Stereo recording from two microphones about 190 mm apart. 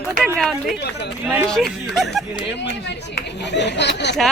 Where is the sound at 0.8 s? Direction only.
60° left (ahead or behind).